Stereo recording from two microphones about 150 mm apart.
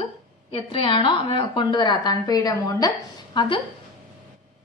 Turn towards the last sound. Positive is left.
turn(degrees=35)  # may be behind; listen again after turning